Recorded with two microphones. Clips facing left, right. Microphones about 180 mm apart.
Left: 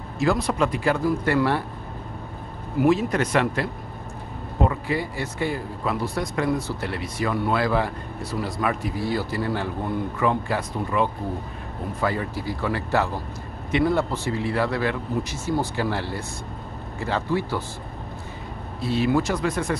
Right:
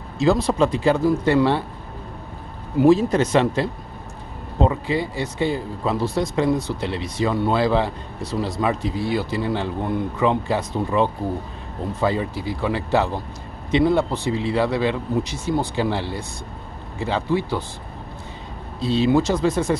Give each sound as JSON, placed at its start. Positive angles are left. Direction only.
{"t": 0.2, "sound": "speech", "side_deg": -25}
{"t": 2.8, "sound": "speech", "side_deg": -30}
{"t": 18.9, "sound": "speech", "side_deg": -25}